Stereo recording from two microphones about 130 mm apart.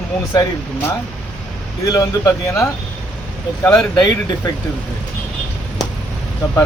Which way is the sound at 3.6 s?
10° left (ahead or behind).